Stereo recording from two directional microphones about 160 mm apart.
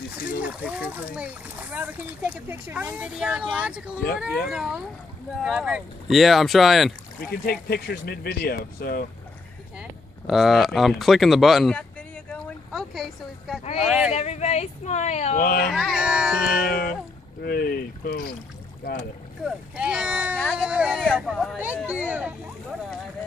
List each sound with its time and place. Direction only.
0.4 s speech: 10° right (ahead or behind)
7.4 s speech: 75° left (ahead or behind)
9.8 s speech: centre (ahead or behind)
12.3 s a sound: 10° left (ahead or behind)
13.7 s speech: 5° right (ahead or behind)
14.1 s speech: 45° left (ahead or behind)
15.4 s speech: 70° left (ahead or behind)
15.7 s speech: centre (ahead or behind)
16.5 s speech: 75° left (ahead or behind)
19.7 s speech: 5° right (ahead or behind)